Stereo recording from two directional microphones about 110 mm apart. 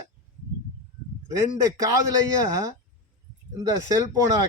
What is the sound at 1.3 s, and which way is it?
A man's voice, 35° right (ahead or behind).